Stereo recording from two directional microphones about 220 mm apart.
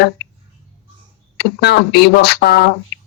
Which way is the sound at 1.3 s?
50° left (ahead or behind).